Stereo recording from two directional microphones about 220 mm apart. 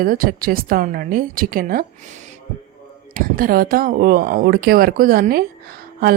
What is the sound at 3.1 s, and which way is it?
Speech, 40° right (ahead or behind).